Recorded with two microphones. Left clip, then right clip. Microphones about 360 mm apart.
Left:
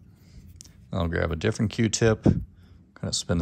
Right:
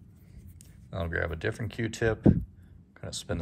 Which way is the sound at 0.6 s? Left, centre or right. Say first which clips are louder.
Left 5 dB; centre.